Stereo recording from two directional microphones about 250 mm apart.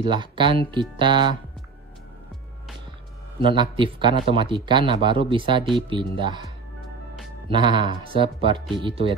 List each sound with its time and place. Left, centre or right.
0.0 s a man's voice: centre
3.4 s a man's voice: centre